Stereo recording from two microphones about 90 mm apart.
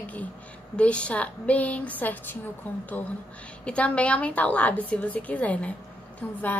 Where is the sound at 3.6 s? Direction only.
15° left (ahead or behind).